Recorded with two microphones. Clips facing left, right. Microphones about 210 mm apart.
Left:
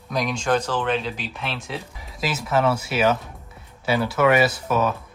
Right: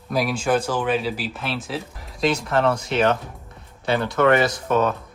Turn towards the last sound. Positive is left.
turn(degrees=5)  # may be behind; listen again after turning